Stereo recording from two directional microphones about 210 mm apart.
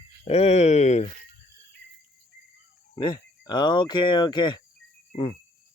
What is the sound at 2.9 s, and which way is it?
Speech, 20° left (ahead or behind).